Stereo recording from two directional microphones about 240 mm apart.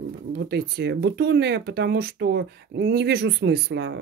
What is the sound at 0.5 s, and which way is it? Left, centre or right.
Speech, right.